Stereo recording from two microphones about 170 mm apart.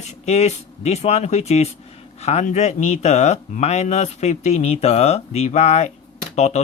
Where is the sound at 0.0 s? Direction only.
40° left (ahead or behind).